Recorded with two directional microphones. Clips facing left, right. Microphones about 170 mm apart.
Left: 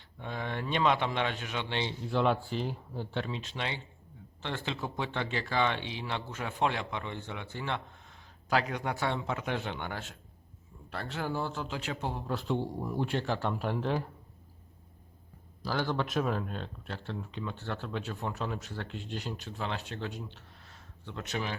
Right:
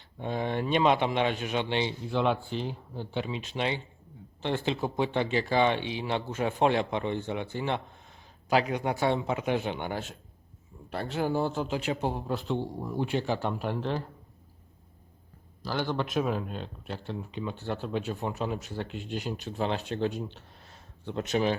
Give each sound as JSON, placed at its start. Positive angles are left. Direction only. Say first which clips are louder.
{"t": 0.2, "sound": "speech", "louder": "right 6 dB", "side_deg": -20}
{"t": 2.0, "sound": "speech", "louder": "left 2 dB", "side_deg": 0}
{"t": 3.2, "sound": "speech", "louder": "right 5 dB", "side_deg": -10}
{"t": 12.3, "sound": "speech", "louder": "right 1 dB", "side_deg": 0}
{"t": 15.6, "sound": "speech", "louder": "right 1 dB", "side_deg": 0}